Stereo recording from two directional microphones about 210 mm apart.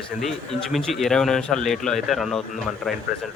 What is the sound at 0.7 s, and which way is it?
Speech, centre (ahead or behind).